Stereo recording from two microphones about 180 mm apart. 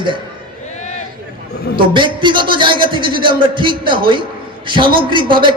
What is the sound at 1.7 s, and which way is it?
A man's voice, 25° right (ahead or behind).